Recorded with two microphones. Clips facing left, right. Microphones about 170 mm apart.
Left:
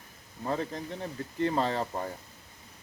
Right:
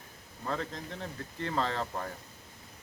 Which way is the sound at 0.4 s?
20° left (ahead or behind).